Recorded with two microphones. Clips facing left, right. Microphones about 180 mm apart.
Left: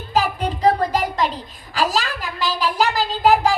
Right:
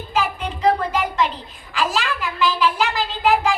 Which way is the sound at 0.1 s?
40° left (ahead or behind).